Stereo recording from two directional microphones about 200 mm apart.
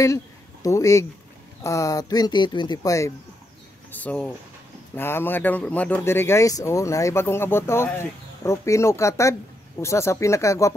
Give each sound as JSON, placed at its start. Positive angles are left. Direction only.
{"t": 0.0, "sound": "speech", "side_deg": 15}